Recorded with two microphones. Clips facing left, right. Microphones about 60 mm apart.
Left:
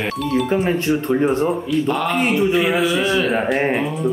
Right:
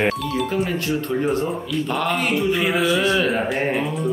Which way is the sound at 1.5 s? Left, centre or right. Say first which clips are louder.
Left 5 dB; centre.